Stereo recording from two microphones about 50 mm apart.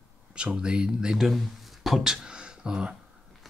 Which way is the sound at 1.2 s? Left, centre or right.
Centre.